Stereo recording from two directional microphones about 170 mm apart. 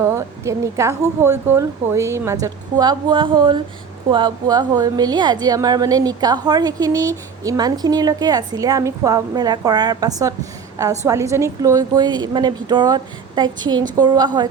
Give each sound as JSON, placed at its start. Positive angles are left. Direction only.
{"t": 0.0, "sound": "a woman's voice", "side_deg": -15}